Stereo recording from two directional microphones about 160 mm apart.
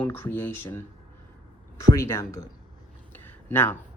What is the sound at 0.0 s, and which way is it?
Speech, 10° left (ahead or behind).